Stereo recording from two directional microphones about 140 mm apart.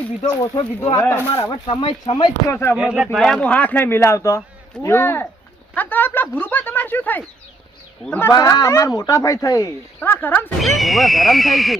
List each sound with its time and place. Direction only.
0.2 s speech: 25° left (ahead or behind)
1.7 s speech: 40° left (ahead or behind)
2.5 s speech: 20° left (ahead or behind)
2.7 s speech: 5° right (ahead or behind); by 8.3 s 10° left (ahead or behind)
8.3 s speech: 25° left (ahead or behind)
10.0 s speech: 15° left (ahead or behind)
10.8 s speech: centre (ahead or behind)